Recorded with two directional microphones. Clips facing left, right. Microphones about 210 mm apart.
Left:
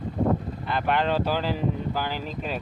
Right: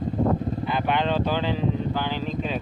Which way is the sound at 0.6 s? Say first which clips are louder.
Left 1 dB; centre (ahead or behind).